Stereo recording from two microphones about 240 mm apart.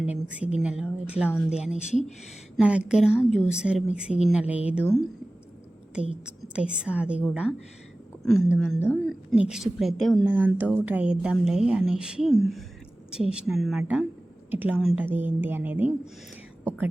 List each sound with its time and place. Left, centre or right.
0.0 s a woman's voice: centre
1.7 s speech: left
2.6 s a woman's voice: centre
3.1 s a woman's voice: centre
3.3 s a woman's voice: centre
6.2 s a woman's voice: centre
8.2 s a woman's voice: centre